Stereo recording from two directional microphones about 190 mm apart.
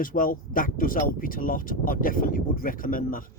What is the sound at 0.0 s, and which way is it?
Speech, 45° left (ahead or behind).